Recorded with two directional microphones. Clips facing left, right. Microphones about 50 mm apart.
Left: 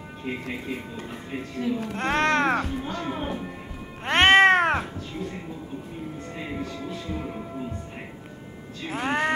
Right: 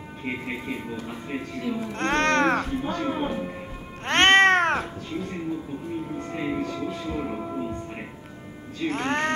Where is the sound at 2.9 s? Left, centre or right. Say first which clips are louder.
Right 3 dB; centre.